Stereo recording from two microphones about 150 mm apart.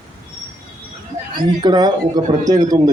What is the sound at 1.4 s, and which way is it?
Speech, 30° right (ahead or behind).